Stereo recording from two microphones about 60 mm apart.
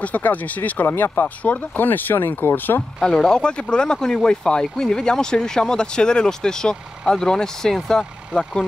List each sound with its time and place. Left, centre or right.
0.0 s speech: left
3.0 s speech: centre